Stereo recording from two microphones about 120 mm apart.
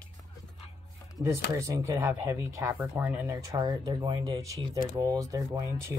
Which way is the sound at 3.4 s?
30° right (ahead or behind).